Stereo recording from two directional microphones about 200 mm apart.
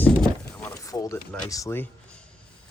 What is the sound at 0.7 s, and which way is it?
Speech, 15° left (ahead or behind).